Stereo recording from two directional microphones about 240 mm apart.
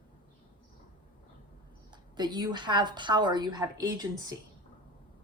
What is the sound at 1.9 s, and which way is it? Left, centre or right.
Speech, centre.